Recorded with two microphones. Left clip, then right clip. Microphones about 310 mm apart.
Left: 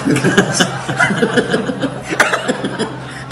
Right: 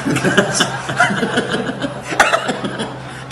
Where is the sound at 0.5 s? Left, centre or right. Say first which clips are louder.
Left 1 dB; centre.